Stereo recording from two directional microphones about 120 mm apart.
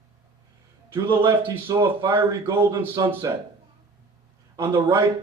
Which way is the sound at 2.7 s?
40° right (ahead or behind).